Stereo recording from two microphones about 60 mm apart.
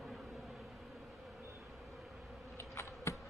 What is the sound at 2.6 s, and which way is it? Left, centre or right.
Insect, left.